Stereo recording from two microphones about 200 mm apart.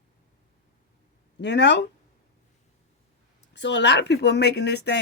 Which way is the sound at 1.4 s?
60° left (ahead or behind).